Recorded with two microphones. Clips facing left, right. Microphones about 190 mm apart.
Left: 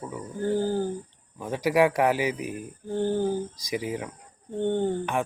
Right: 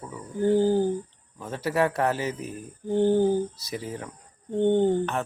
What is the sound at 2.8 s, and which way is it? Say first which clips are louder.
Speech: right 5 dB; 15° right (ahead or behind).